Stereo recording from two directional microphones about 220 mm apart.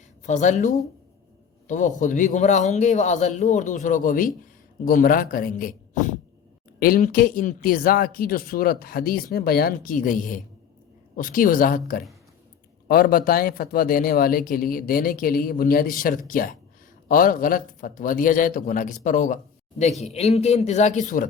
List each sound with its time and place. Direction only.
0.3 s speech: 35° left (ahead or behind)
1.6 s a man's voice: 35° left (ahead or behind)